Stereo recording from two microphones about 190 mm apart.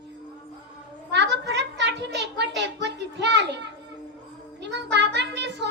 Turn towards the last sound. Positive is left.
turn(degrees=-65)  # may be behind; listen again after turning